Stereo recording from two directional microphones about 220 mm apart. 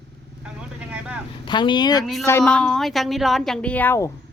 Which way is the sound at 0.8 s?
5° right (ahead or behind).